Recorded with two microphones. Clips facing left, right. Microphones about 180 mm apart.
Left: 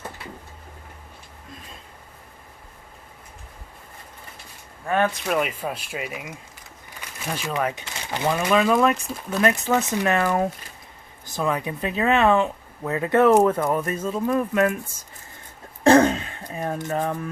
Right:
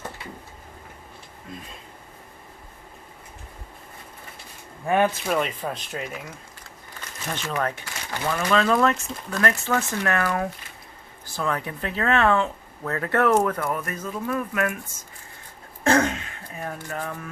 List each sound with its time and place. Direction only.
4.9 s speech: 15° right (ahead or behind)
5.3 s speech: 5° left (ahead or behind); by 14.8 s 25° left (ahead or behind)
15.8 s throat clearing: 30° left (ahead or behind)
16.7 s speech: 20° left (ahead or behind)